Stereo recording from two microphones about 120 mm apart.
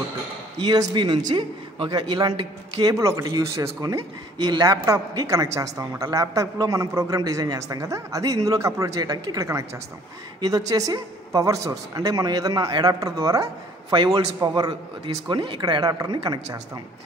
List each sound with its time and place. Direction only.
0.6 s a man's voice: 40° right (ahead or behind)